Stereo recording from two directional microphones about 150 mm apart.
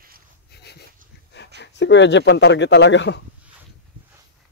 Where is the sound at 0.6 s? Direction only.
90° left.